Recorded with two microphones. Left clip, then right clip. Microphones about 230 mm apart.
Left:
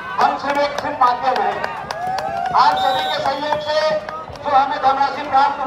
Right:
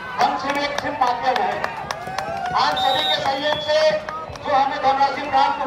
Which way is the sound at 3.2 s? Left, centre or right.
Centre.